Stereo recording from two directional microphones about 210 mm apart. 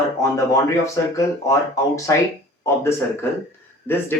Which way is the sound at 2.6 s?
10° left (ahead or behind).